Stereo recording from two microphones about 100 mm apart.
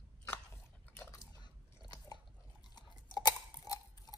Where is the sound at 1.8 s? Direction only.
40° left (ahead or behind).